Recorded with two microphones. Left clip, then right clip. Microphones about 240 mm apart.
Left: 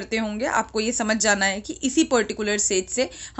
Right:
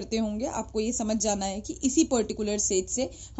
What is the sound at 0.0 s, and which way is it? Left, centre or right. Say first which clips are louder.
A woman's voice: left 5 dB; centre.